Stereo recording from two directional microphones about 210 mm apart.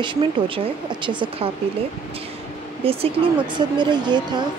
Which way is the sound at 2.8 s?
25° right (ahead or behind).